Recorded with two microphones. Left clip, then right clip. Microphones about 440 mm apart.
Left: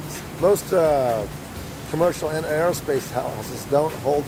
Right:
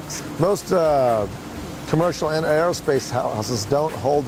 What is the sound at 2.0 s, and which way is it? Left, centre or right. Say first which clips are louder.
Speech: even; right.